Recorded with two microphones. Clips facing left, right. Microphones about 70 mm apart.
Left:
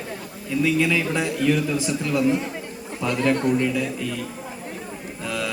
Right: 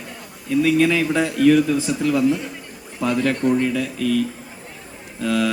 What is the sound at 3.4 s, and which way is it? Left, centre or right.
Speech, right.